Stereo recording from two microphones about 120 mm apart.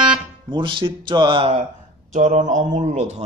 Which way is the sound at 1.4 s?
60° right (ahead or behind).